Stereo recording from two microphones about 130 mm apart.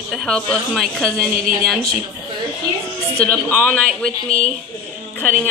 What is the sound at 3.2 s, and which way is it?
A woman's voice, 10° left (ahead or behind).